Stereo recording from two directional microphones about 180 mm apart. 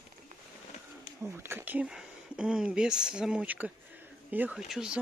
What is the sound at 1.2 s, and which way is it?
Speech, 15° right (ahead or behind).